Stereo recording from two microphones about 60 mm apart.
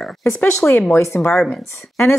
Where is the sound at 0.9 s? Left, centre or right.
Left.